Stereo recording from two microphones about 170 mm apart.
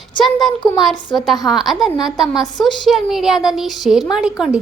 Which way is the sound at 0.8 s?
Centre (ahead or behind).